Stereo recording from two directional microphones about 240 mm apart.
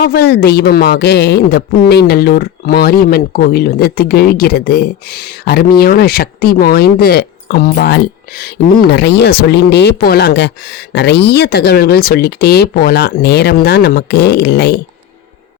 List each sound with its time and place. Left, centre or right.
0.0 s a woman's voice: left